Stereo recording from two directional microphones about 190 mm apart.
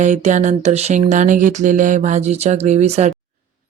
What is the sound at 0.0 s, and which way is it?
Speech, 40° right (ahead or behind).